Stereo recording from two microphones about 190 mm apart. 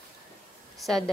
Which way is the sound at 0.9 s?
Centre (ahead or behind).